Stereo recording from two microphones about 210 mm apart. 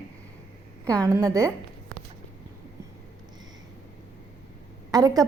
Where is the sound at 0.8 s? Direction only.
15° right (ahead or behind).